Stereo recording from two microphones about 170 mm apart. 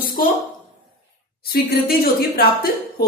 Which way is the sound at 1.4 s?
65° left (ahead or behind).